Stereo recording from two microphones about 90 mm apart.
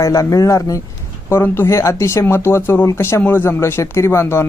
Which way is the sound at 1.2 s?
25° left (ahead or behind).